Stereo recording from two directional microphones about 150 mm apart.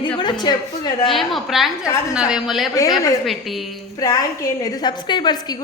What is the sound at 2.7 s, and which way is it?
Speech, 25° left (ahead or behind).